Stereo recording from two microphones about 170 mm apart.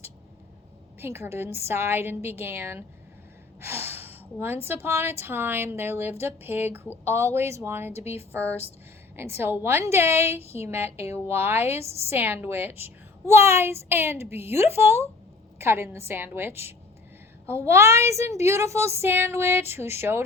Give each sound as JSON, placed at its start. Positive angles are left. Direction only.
{"t": 0.9, "sound": "a woman's voice", "side_deg": -15}
{"t": 7.9, "sound": "a woman's voice", "side_deg": 40}
{"t": 8.3, "sound": "a woman's voice", "side_deg": -15}